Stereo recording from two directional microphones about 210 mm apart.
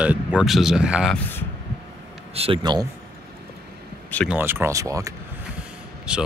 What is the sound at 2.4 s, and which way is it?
Speech, 20° right (ahead or behind).